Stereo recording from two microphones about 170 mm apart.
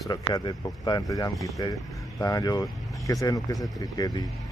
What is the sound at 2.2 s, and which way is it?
Speech, 20° left (ahead or behind).